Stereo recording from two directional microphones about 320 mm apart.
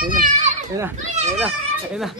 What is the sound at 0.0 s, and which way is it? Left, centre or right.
Children playing, right.